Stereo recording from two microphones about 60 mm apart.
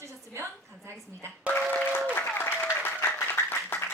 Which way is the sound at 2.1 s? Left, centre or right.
Left.